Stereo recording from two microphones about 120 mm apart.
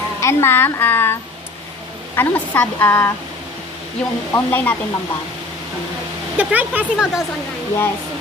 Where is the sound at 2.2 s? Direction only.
15° left (ahead or behind).